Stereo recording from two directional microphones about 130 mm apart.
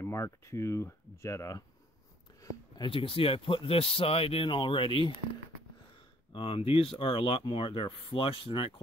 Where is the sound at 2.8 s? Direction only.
40° left (ahead or behind).